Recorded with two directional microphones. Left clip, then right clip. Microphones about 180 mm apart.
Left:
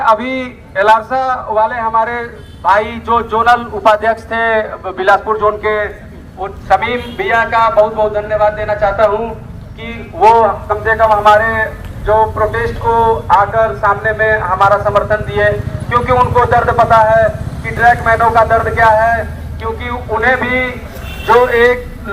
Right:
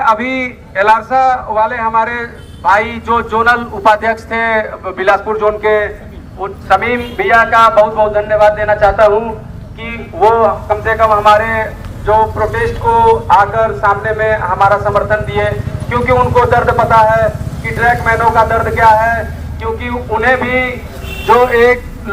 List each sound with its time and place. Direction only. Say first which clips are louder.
0.0 s a man's voice: even; 25° right (ahead or behind); by 5.9 s 90° right
6.4 s a man's voice: right 1 dB; 60° right (ahead or behind); by 9.0 s 40° right (ahead or behind)
9.8 s speech: left 2 dB; 50° right (ahead or behind); by 11.0 s 70° right (ahead or behind)
11.0 s a man's voice: even; 40° right (ahead or behind)
12.0 s a man's voice: even; 15° right (ahead or behind)